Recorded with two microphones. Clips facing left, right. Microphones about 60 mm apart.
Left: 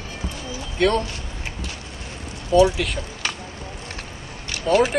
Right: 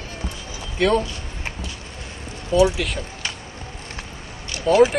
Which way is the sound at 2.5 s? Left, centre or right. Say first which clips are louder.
Left 1 dB; centre.